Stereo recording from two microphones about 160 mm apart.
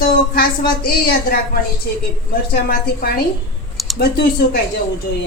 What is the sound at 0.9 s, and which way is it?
Speech, 70° left (ahead or behind).